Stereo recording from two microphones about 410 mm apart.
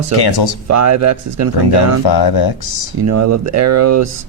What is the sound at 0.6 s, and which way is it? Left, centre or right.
Speech, right.